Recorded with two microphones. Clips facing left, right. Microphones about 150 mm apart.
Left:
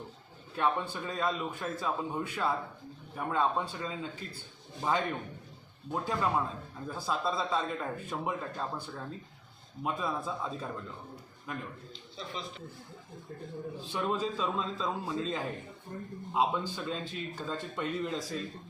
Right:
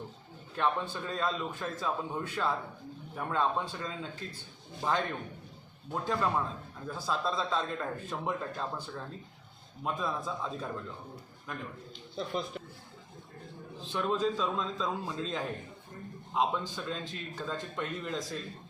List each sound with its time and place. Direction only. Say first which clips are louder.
0.5 s a man's voice: even; 10° left (ahead or behind)
12.1 s a man's voice: right 6 dB; 50° right (ahead or behind)
13.8 s a man's voice: right 3 dB; 10° left (ahead or behind)